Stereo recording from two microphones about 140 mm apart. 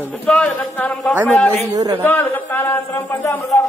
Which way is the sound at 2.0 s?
15° left (ahead or behind).